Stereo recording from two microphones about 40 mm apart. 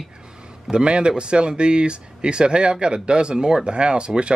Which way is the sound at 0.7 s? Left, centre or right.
Right.